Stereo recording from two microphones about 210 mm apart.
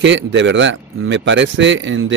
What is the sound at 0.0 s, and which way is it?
Speech, 60° right (ahead or behind).